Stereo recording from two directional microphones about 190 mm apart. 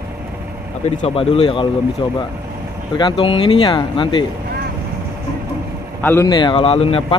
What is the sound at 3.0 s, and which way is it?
Speech, 25° left (ahead or behind).